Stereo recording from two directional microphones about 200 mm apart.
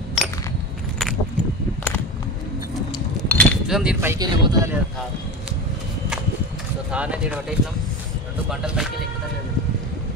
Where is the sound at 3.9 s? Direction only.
15° right (ahead or behind).